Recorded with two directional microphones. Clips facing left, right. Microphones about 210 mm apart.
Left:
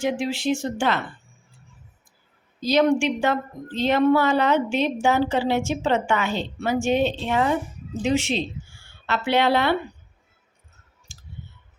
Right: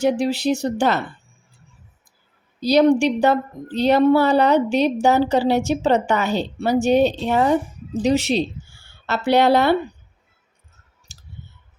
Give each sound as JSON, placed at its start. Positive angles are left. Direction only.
{"t": 0.0, "sound": "a woman's voice", "side_deg": -40}
{"t": 2.6, "sound": "a woman's voice", "side_deg": -35}
{"t": 11.1, "sound": "clicking", "side_deg": -40}